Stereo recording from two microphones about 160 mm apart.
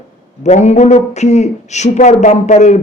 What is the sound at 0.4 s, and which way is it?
A man's voice, 45° left (ahead or behind).